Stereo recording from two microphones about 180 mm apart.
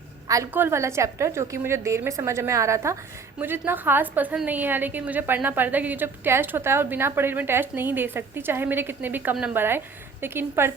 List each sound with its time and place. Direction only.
0.3 s a woman's voice: 15° right (ahead or behind)